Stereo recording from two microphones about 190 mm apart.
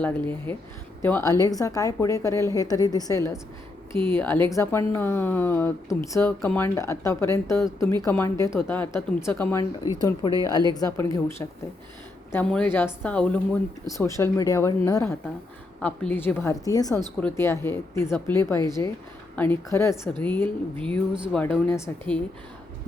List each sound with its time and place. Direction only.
0.0 s speech: 10° left (ahead or behind)
21.1 s speech: 5° right (ahead or behind)
21.7 s speech: 10° left (ahead or behind)